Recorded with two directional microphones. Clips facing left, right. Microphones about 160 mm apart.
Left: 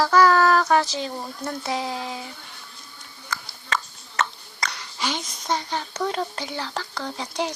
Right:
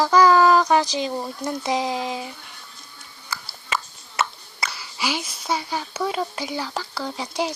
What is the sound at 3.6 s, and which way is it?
Speech, 10° right (ahead or behind).